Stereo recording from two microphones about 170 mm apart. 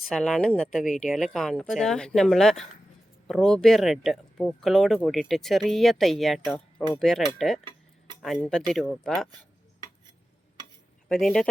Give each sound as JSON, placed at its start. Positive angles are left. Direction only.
{"t": 0.0, "sound": "speech", "side_deg": 5}
{"t": 7.6, "sound": "a sound", "side_deg": -25}
{"t": 8.2, "sound": "speech", "side_deg": 0}
{"t": 11.1, "sound": "speech", "side_deg": 5}